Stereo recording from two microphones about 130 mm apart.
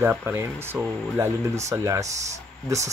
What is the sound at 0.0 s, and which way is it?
Speech, 15° right (ahead or behind).